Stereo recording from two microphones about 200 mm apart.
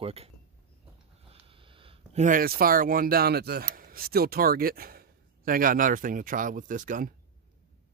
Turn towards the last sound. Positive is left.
turn(degrees=-40)  # may be behind; listen again after turning